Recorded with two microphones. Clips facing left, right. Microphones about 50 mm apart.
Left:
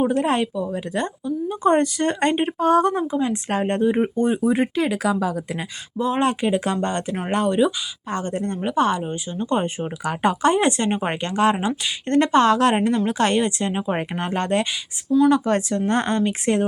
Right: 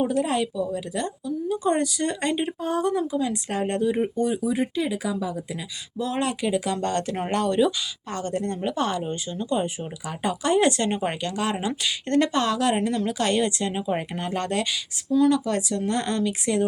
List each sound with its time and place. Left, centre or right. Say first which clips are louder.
0.1 s a woman's voice: left 3 dB; left
2.6 s a woman's voice: left 9 dB; left
3.1 s a woman's voice: left 4 dB; left
6.0 s a woman's voice: left 5 dB; left
6.8 s speech: left 1 dB; left
8.1 s speech: left 3 dB; left
9.4 s speech: left 4 dB; left
10.4 s a woman's voice: even; left